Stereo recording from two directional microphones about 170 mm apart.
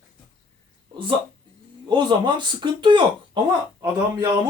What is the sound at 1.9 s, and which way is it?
Speech, 25° right (ahead or behind).